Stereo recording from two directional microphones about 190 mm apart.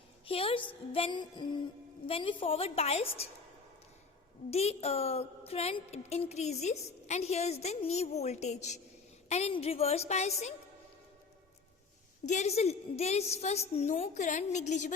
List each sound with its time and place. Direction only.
0.3 s a woman's voice: 30° left (ahead or behind)
4.5 s a woman's voice: 35° left (ahead or behind)
12.2 s a woman's voice: 40° left (ahead or behind)